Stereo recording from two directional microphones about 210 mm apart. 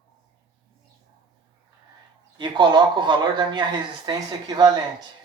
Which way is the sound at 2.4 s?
20° right (ahead or behind).